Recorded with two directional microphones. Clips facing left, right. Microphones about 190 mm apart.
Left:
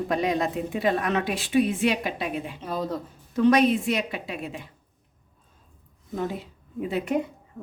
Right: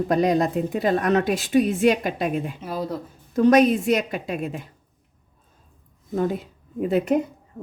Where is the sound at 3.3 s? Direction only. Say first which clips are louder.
Right 3 dB; 45° right (ahead or behind).